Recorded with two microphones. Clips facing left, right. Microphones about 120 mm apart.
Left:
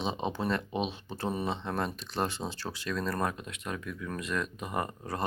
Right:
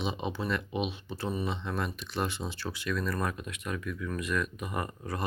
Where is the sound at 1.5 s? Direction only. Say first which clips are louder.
Left 1 dB; 35° left (ahead or behind).